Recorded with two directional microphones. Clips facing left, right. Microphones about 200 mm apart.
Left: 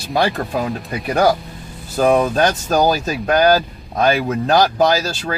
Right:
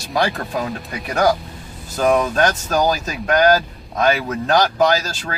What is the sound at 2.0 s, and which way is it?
Speech, 30° left (ahead or behind).